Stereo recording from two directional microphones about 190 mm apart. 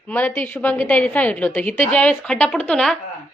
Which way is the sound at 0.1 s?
10° left (ahead or behind).